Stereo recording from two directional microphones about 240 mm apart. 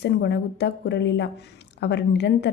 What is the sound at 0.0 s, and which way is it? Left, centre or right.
Speech, left.